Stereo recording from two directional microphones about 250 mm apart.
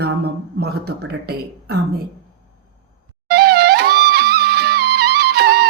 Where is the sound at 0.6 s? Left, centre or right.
Right.